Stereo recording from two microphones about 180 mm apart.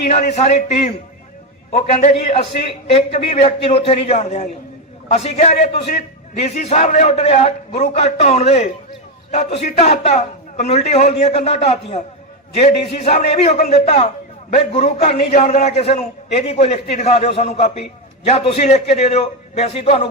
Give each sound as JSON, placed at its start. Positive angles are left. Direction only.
{"t": 0.1, "sound": "a man's voice", "side_deg": 40}